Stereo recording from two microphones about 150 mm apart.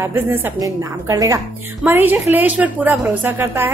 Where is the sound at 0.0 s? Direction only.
15° right (ahead or behind).